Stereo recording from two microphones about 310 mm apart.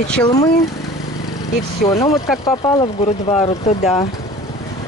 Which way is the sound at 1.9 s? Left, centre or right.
Centre.